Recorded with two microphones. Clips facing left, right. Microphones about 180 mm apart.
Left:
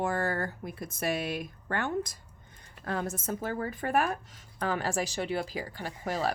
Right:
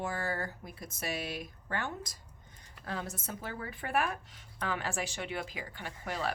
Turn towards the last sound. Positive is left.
turn(degrees=40)  # may be behind; listen again after turning